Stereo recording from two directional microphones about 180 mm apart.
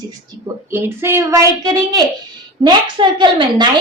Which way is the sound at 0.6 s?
10° right (ahead or behind).